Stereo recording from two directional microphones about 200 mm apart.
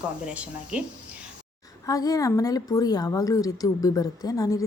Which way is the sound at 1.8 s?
15° left (ahead or behind).